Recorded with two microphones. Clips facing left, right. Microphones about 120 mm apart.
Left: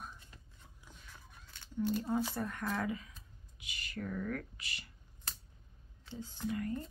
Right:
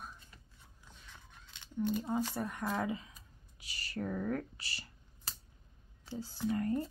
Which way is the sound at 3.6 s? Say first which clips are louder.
Right 3 dB; 35° right (ahead or behind).